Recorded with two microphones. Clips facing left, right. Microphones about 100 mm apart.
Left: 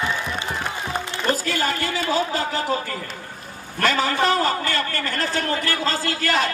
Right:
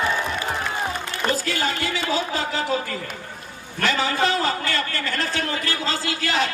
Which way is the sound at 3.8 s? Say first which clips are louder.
Left 1 dB; 45° left (ahead or behind).